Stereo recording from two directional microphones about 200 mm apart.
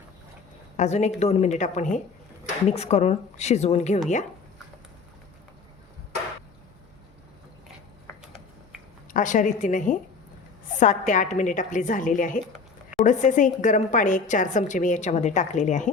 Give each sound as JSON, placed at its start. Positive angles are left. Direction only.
{"t": 0.8, "sound": "a woman's voice", "side_deg": 35}
{"t": 9.1, "sound": "a woman's voice", "side_deg": 40}